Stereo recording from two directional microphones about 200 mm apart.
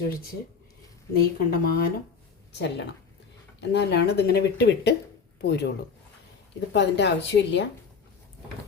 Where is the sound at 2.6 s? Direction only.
60° left (ahead or behind).